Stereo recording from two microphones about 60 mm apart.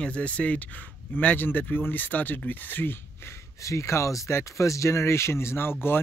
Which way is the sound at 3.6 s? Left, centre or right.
Left.